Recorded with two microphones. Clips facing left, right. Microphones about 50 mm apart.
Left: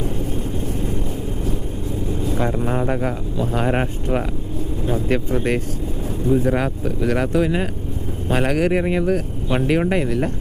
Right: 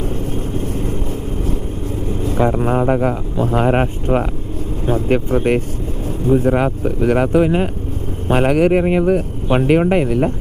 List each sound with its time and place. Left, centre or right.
0.0 s vehicle: right
2.2 s speech: right
2.7 s speech: right
3.0 s speech: right
4.9 s speech: right